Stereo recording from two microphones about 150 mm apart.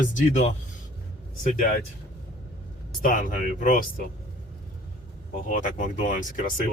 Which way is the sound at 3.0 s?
65° left (ahead or behind).